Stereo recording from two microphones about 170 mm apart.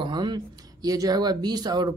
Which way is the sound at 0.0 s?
25° right (ahead or behind).